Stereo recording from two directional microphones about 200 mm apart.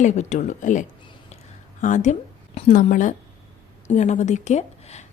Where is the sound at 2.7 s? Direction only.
40° left (ahead or behind).